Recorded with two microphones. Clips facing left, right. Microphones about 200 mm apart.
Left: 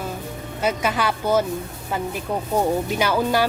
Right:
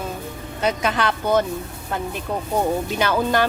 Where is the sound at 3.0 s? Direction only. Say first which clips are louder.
Right 1 dB; 10° left (ahead or behind).